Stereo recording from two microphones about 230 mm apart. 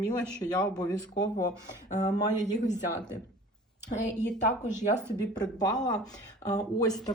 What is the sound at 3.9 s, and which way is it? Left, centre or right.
Speech, left.